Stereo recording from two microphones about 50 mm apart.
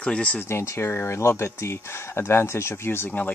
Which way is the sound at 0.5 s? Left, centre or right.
Left.